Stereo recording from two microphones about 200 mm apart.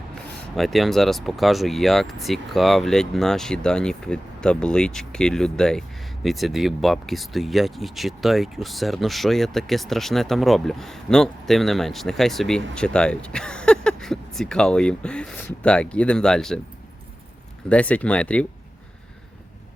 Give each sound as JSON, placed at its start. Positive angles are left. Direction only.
{"t": 0.5, "sound": "speech", "side_deg": 0}
{"t": 17.7, "sound": "speech", "side_deg": 5}